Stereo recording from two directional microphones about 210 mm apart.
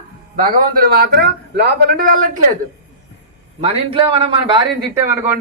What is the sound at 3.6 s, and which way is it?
Speech, 25° right (ahead or behind).